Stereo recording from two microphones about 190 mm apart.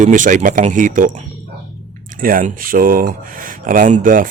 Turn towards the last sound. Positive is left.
turn(degrees=-45)  # may be behind; listen again after turning